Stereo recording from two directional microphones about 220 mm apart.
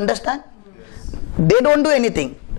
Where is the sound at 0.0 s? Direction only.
20° left (ahead or behind).